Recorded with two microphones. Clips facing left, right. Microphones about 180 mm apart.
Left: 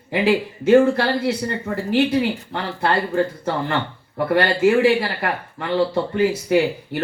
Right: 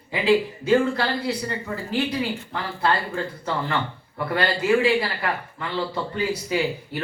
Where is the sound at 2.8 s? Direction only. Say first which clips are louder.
Left 5 dB; 55° left (ahead or behind).